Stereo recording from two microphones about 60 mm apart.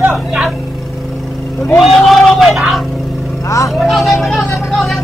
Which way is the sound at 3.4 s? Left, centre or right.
Left.